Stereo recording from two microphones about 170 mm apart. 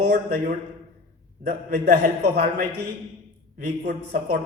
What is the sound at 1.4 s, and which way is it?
Speech, 60° right (ahead or behind).